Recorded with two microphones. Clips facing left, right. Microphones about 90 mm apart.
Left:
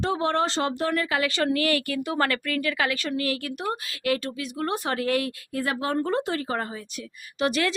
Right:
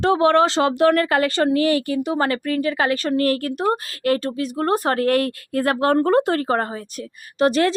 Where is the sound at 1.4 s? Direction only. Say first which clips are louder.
Right 6 dB; 30° right (ahead or behind); by 6.7 s 50° right (ahead or behind).